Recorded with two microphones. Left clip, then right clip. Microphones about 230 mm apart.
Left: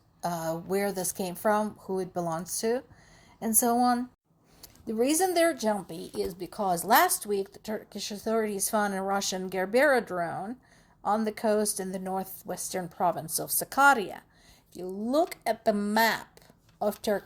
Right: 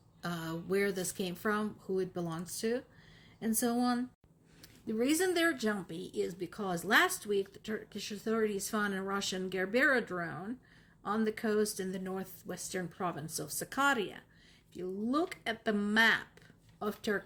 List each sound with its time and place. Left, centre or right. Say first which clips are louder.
0.2 s a woman's voice: left 9 dB; centre